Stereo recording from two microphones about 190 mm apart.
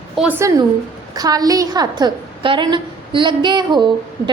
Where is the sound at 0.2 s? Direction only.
10° right (ahead or behind).